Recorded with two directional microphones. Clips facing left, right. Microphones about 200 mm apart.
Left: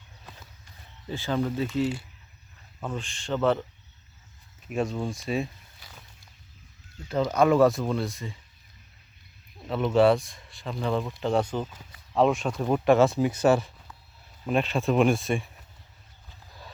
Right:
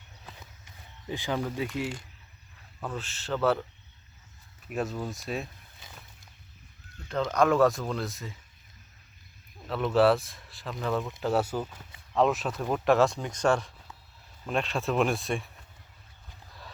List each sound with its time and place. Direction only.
0.6 s a sound: 15° right (ahead or behind)
1.6 s speech: 10° right (ahead or behind)
4.7 s speech: 5° right (ahead or behind)
5.8 s a sound: 25° right (ahead or behind)
7.1 s speech: 5° left (ahead or behind)
9.6 s speech: centre (ahead or behind)